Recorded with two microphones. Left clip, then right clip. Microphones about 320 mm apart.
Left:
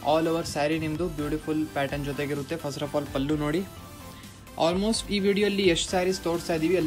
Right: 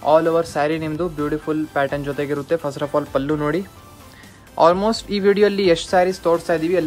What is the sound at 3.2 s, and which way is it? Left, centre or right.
Speech, centre.